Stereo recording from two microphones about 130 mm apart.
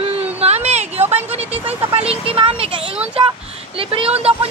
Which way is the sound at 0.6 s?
55° right (ahead or behind).